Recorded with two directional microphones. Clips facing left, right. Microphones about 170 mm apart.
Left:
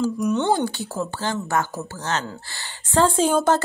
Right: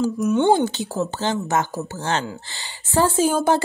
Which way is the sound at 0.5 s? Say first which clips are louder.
Right 4 dB; 20° right (ahead or behind).